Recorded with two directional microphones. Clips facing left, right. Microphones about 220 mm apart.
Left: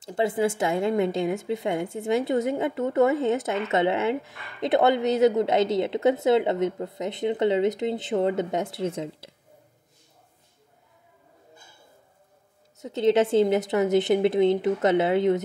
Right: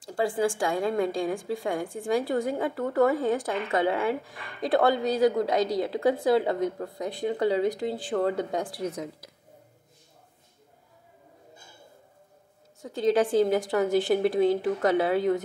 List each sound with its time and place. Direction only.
0.0 s a woman's voice: 20° left (ahead or behind)
12.7 s a woman's voice: 20° left (ahead or behind)